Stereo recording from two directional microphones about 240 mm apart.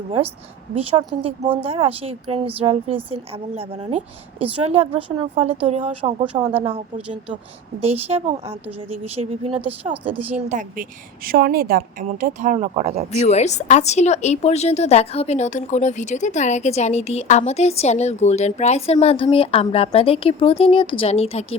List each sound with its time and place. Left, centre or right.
0.8 s a woman's voice: right
9.8 s a woman's voice: centre
10.5 s a woman's voice: right
13.2 s a woman's voice: left